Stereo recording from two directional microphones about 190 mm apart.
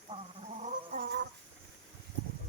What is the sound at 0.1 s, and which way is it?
Gargling, 35° right (ahead or behind).